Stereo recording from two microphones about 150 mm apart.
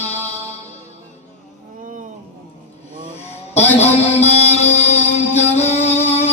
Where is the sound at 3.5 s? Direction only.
45° left (ahead or behind).